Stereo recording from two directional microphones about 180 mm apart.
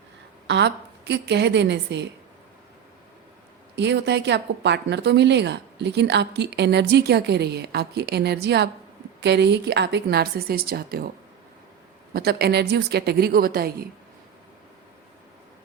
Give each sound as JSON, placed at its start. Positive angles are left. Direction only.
{"t": 0.4, "sound": "a woman's voice", "side_deg": -75}
{"t": 3.8, "sound": "a woman's voice", "side_deg": -70}
{"t": 12.1, "sound": "speech", "side_deg": -60}